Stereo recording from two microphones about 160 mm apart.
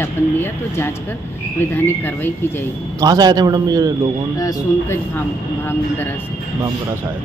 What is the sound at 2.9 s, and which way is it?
Speech, 25° right (ahead or behind).